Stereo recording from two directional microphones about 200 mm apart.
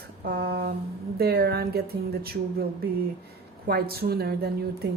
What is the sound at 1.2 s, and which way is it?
Speech, 55° right (ahead or behind).